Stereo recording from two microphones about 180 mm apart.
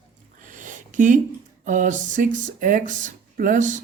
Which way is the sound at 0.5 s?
45° right (ahead or behind).